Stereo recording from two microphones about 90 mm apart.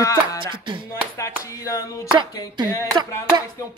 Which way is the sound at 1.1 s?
35° left (ahead or behind).